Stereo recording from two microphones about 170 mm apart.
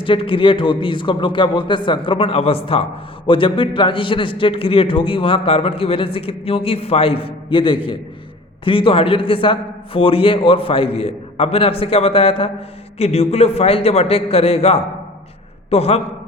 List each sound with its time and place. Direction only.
0.0 s a man's voice: 30° left (ahead or behind)